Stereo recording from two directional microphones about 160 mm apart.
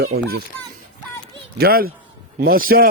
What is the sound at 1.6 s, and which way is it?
Speech, 70° right (ahead or behind).